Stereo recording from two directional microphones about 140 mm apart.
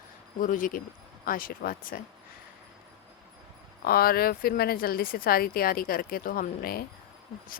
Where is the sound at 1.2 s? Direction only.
90° left.